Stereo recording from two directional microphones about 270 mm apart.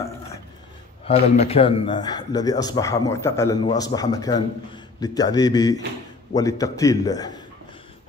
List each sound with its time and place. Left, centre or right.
1.1 s speech: left
1.4 s speech: left